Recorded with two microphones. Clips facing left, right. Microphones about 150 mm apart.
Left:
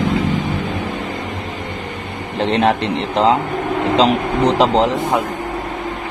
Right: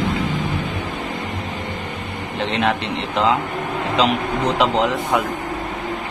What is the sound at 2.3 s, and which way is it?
A man's voice, 35° left (ahead or behind).